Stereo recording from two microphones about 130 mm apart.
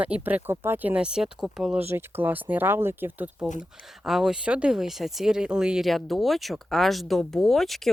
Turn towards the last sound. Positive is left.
turn(degrees=0)  # may be behind; listen again after turning